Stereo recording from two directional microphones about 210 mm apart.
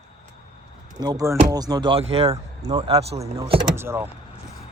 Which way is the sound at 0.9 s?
20° right (ahead or behind).